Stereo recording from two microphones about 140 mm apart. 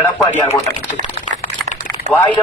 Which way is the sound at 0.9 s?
60° left (ahead or behind).